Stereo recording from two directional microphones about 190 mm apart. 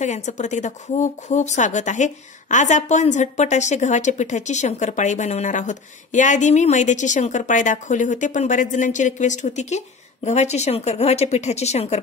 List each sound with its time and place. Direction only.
0.0 s speech: 40° left (ahead or behind)